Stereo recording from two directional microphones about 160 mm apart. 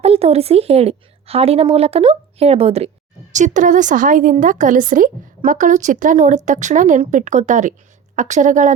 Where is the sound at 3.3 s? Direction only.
50° right (ahead or behind).